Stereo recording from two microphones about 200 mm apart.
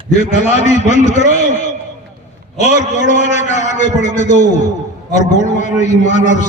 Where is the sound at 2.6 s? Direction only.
35° left (ahead or behind).